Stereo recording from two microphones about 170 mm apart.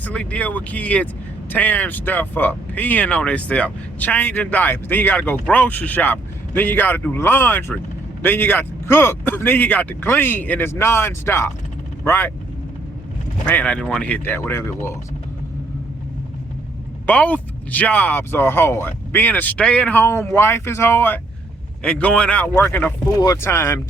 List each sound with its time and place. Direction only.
0.0 s speech: 5° left (ahead or behind)
13.5 s speech: 10° left (ahead or behind)
17.1 s speech: 10° left (ahead or behind)